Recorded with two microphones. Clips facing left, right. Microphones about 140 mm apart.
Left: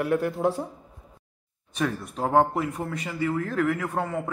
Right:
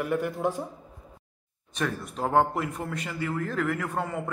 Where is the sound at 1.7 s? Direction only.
5° left (ahead or behind).